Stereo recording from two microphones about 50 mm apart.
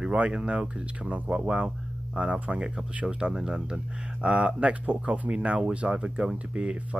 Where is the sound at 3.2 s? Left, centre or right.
Centre.